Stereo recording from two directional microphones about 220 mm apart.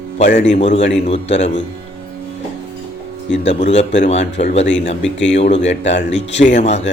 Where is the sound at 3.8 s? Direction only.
30° left (ahead or behind).